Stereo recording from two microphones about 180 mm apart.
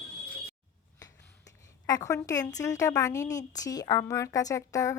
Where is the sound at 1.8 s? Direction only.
20° left (ahead or behind).